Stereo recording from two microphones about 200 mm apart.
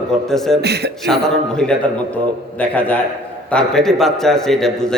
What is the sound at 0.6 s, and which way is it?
Speech, 55° right (ahead or behind).